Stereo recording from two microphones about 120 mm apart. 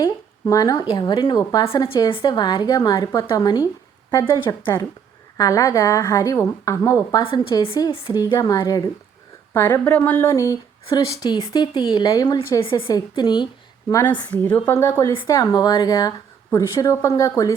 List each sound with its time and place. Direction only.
0.0 s a woman's voice: 30° left (ahead or behind)
5.4 s a woman's voice: 30° left (ahead or behind)
7.3 s a woman's voice: 45° left (ahead or behind)
8.1 s a woman's voice: 30° left (ahead or behind)
12.5 s a woman's voice: 50° left (ahead or behind)
12.9 s a woman's voice: 35° left (ahead or behind)
14.3 s a woman's voice: 10° left (ahead or behind)
15.3 s a woman's voice: 35° left (ahead or behind)